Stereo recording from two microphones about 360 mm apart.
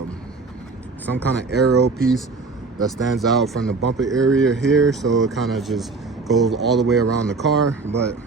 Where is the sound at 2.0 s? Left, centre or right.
Centre.